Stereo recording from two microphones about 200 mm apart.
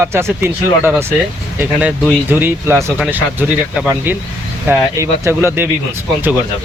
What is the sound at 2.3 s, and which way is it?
Speech, 10° right (ahead or behind).